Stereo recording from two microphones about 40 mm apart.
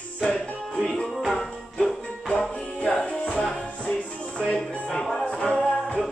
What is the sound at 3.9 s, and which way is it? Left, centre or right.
Music, left.